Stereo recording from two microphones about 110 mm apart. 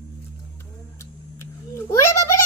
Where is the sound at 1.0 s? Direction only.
25° left (ahead or behind).